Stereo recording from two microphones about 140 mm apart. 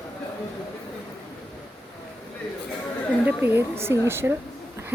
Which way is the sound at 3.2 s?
15° right (ahead or behind).